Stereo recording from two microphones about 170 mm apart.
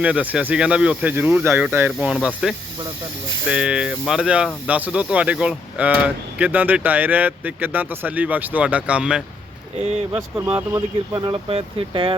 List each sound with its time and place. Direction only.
0.0 s speech: 10° right (ahead or behind); by 12.1 s 30° right (ahead or behind)